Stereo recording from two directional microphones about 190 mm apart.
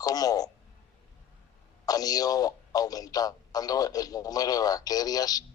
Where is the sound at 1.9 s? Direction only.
20° left (ahead or behind).